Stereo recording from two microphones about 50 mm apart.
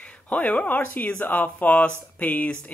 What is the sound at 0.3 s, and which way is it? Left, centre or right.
Speech, left.